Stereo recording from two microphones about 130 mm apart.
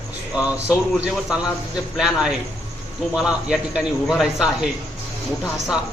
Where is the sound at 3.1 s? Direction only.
5° right (ahead or behind).